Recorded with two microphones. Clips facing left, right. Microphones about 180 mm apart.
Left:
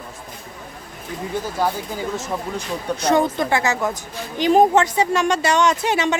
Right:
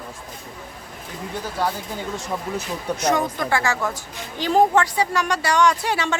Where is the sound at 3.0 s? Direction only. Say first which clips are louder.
Left 4 dB; 30° left (ahead or behind).